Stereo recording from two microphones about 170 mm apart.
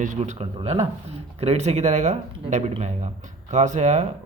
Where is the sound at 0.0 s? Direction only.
40° right (ahead or behind).